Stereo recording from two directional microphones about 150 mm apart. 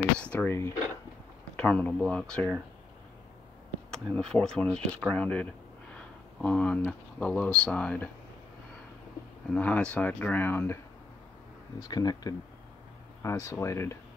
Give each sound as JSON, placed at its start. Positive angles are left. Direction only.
{"t": 0.2, "sound": "speech", "side_deg": 10}
{"t": 3.9, "sound": "speech", "side_deg": 5}
{"t": 9.5, "sound": "speech", "side_deg": 10}
{"t": 11.9, "sound": "speech", "side_deg": 25}